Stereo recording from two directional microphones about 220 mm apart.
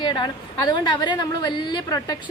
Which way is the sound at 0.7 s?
20° left (ahead or behind).